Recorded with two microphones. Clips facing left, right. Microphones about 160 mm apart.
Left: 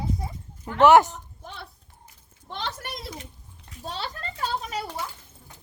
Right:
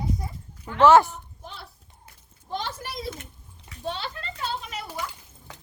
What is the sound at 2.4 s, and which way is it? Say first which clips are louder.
Speech: right 2 dB; 75° left (ahead or behind).